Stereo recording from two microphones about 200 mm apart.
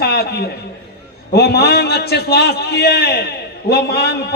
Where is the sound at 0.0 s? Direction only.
50° left (ahead or behind).